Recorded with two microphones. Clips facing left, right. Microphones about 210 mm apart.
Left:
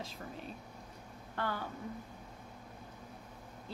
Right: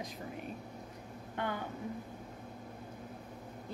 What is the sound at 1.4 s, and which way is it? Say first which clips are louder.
Speech: right 1 dB; 20° right (ahead or behind).